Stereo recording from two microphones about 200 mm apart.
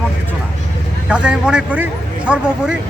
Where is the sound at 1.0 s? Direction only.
5° right (ahead or behind).